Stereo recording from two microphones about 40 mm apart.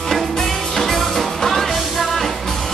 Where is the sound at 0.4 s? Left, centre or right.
Centre.